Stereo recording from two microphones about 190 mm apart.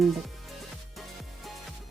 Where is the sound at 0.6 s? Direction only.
Centre (ahead or behind).